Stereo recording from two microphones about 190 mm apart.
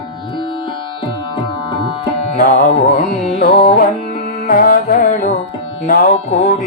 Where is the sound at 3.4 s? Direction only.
50° left (ahead or behind).